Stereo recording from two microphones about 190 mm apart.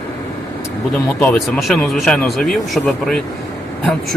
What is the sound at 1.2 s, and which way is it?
Speech, 5° left (ahead or behind).